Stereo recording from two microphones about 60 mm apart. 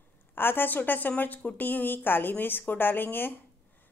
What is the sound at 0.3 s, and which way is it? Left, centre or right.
A woman's voice, left.